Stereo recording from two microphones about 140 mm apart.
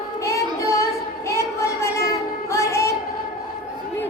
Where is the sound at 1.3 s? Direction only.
20° left (ahead or behind).